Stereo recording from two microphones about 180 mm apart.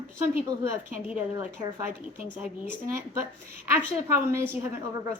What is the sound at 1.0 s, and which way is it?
Speech, 5° right (ahead or behind).